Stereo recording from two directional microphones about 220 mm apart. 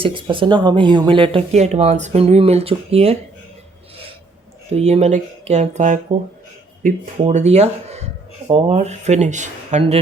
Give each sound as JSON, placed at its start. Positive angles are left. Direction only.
{"t": 0.0, "sound": "speech", "side_deg": -20}
{"t": 4.7, "sound": "speech", "side_deg": -30}